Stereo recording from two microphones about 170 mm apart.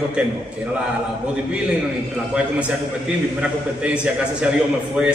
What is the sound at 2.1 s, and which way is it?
A man's voice, 5° right (ahead or behind).